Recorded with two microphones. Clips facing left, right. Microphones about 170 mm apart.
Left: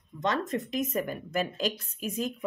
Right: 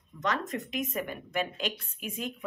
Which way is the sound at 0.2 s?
30° left (ahead or behind).